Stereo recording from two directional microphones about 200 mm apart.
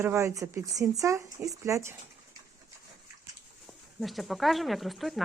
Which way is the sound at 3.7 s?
Centre (ahead or behind).